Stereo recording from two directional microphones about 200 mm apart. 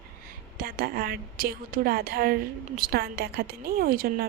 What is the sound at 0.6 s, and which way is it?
Speech, 50° right (ahead or behind).